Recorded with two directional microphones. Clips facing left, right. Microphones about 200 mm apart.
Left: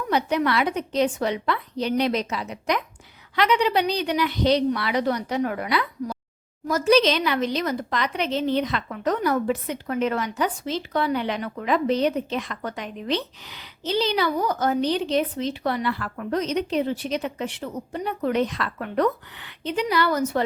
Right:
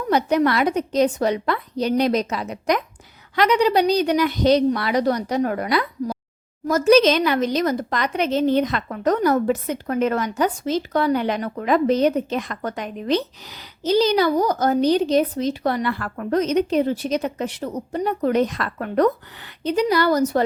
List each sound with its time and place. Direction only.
0.1 s a woman's voice: 40° right (ahead or behind)